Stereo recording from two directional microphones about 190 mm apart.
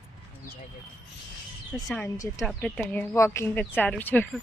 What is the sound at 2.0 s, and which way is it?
Speech, 15° left (ahead or behind).